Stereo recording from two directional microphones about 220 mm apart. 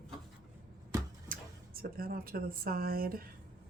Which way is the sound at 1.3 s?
40° right (ahead or behind).